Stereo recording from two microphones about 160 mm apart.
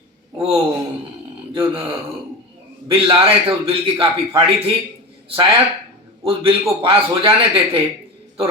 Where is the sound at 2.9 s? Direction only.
35° right (ahead or behind).